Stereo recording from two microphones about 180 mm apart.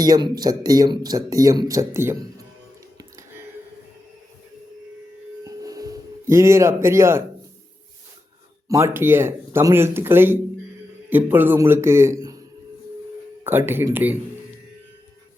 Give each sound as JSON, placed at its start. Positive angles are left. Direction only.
{"t": 0.0, "sound": "speech", "side_deg": -20}
{"t": 3.0, "sound": "a sound", "side_deg": -15}
{"t": 5.5, "sound": "tuning fork", "side_deg": -20}
{"t": 8.6, "sound": "speech", "side_deg": -15}
{"t": 13.4, "sound": "speech", "side_deg": -10}